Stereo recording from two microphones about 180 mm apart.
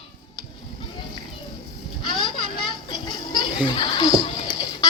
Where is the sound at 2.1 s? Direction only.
25° left (ahead or behind).